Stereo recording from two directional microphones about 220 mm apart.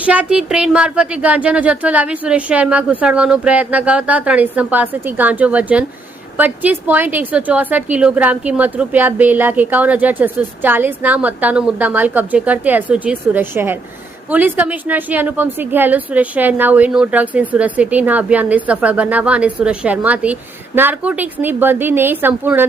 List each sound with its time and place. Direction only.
0.0 s a woman's voice: 5° right (ahead or behind)